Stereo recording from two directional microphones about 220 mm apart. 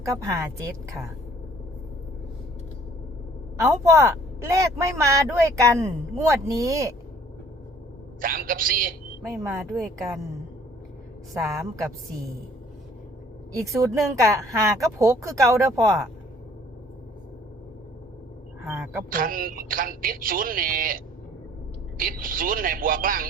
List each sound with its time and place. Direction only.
0.0 s speech: 15° right (ahead or behind)
3.6 s speech: 15° right (ahead or behind)
8.2 s a woman's voice: 40° right (ahead or behind)
11.3 s speech: 15° right (ahead or behind)
13.6 s speech: 15° right (ahead or behind)
19.1 s a woman's voice: 40° right (ahead or behind)